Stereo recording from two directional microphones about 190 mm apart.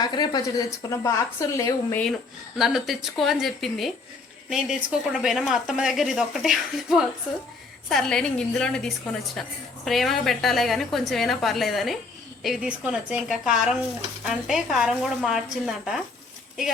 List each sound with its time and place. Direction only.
0.0 s a woman's voice: 20° left (ahead or behind)
2.6 s speech: centre (ahead or behind)